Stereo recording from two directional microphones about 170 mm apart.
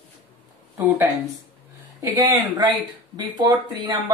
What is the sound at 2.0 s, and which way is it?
Speech, 25° right (ahead or behind).